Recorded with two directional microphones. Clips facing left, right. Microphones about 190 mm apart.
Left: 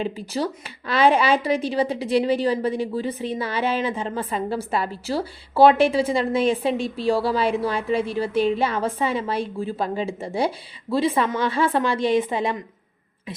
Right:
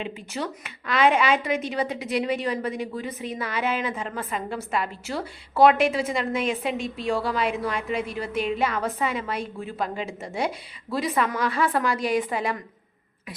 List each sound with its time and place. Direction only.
0.0 s a woman's voice: 35° left (ahead or behind)